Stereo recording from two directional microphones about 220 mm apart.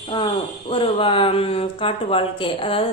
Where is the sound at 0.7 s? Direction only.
25° left (ahead or behind).